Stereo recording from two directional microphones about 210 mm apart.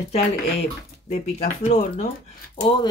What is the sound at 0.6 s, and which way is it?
Speech, 30° left (ahead or behind).